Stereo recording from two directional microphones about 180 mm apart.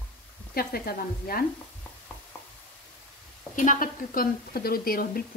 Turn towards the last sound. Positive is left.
turn(degrees=55)  # may be behind; listen again after turning